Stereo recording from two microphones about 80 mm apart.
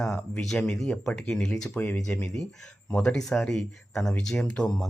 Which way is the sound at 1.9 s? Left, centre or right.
Centre.